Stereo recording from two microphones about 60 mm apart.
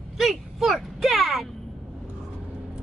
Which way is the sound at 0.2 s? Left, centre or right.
Centre.